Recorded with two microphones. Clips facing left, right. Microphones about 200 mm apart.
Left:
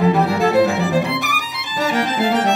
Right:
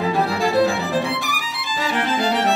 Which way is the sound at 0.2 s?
20° left (ahead or behind).